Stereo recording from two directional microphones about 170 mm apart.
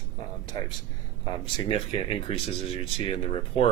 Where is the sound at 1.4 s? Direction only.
30° left (ahead or behind).